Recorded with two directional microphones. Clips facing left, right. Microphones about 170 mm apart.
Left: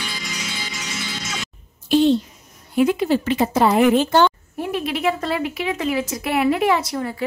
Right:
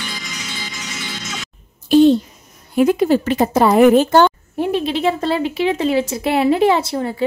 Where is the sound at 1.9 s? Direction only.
45° right (ahead or behind).